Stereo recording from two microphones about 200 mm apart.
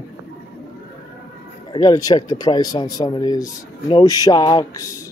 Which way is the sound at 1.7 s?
20° left (ahead or behind).